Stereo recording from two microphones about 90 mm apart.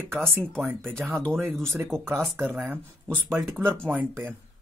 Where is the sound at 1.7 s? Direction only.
30° right (ahead or behind).